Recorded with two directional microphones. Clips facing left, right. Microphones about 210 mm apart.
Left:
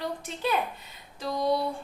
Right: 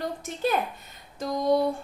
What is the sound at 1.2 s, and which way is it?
Speech, 45° right (ahead or behind).